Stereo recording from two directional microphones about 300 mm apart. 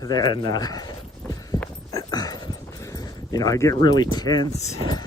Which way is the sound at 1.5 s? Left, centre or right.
Centre.